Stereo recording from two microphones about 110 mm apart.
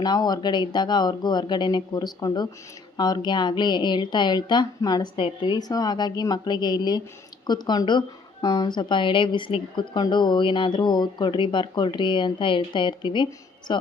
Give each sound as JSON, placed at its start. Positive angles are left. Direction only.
{"t": 0.0, "sound": "speech", "side_deg": 40}
{"t": 5.1, "sound": "speech", "side_deg": 50}